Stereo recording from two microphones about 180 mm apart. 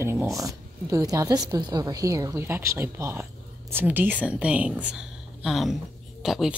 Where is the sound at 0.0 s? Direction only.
15° right (ahead or behind).